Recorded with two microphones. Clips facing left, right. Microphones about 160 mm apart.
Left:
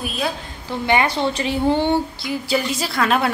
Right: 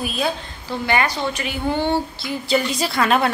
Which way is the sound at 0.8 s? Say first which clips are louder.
Left 3 dB; 25° left (ahead or behind).